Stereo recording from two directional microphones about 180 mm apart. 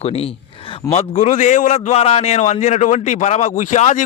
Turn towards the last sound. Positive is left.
turn(degrees=40)  # may be behind; listen again after turning